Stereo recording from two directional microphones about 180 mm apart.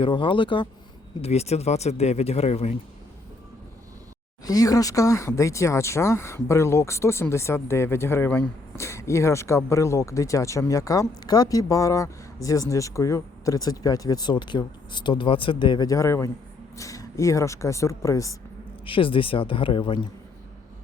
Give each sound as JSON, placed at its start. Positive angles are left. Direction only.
{"t": 0.0, "sound": "speech", "side_deg": 30}
{"t": 4.4, "sound": "speech", "side_deg": 20}
{"t": 18.9, "sound": "speech", "side_deg": 30}